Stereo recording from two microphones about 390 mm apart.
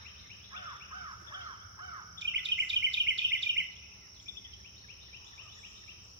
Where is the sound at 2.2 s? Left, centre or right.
Right.